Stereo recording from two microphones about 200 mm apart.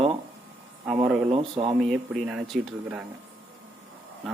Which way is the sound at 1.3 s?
25° right (ahead or behind).